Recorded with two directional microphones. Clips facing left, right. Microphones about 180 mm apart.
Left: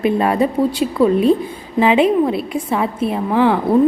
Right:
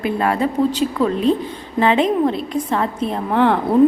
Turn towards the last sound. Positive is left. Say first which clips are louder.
# left 1 dB
turn(degrees=0)  # may be behind; listen again after turning